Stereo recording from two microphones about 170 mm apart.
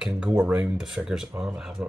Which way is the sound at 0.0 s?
5° right (ahead or behind).